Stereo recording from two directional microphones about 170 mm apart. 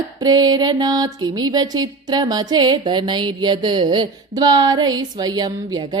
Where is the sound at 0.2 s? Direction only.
20° right (ahead or behind).